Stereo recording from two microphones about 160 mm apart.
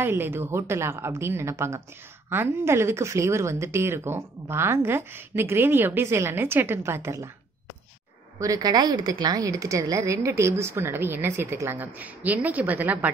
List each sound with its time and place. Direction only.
0.0 s speech: 15° right (ahead or behind)
8.4 s speech: 20° right (ahead or behind)